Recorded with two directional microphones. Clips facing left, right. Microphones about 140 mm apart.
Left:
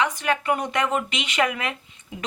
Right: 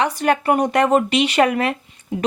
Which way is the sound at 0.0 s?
35° right (ahead or behind).